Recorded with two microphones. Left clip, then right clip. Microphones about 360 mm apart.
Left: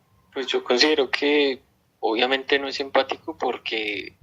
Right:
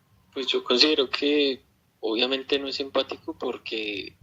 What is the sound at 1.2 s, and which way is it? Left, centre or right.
A man's voice, left.